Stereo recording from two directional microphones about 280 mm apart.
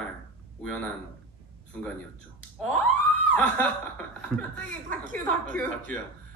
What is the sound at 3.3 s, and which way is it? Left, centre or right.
Speech, centre.